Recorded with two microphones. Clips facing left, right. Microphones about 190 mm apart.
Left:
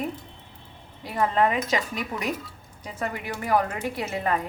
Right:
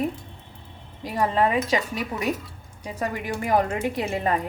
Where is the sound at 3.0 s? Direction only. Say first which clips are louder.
Right 3 dB; 15° right (ahead or behind).